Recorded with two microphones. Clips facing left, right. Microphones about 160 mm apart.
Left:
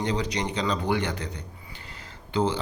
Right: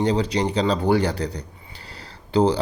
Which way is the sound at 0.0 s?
30° right (ahead or behind).